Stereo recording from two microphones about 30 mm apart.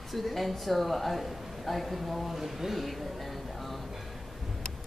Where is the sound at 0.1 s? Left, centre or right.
Centre.